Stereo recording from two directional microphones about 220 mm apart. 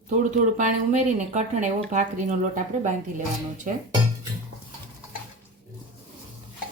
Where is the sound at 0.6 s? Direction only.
35° right (ahead or behind).